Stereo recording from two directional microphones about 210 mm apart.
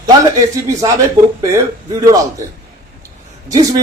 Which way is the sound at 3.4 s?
15° right (ahead or behind).